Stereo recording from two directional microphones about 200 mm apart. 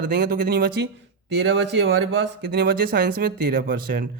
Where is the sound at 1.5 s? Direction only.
65° right (ahead or behind).